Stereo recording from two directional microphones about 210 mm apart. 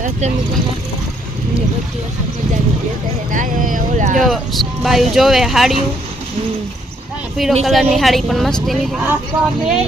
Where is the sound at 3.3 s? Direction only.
40° right (ahead or behind).